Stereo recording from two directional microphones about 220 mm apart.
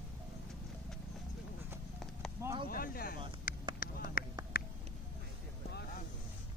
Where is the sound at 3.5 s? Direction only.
40° left (ahead or behind).